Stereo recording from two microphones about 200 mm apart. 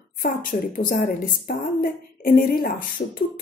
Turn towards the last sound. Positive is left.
turn(degrees=45)  # may be behind; listen again after turning